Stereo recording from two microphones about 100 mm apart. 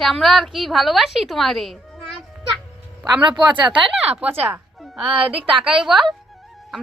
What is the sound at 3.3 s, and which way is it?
Speech, 10° right (ahead or behind).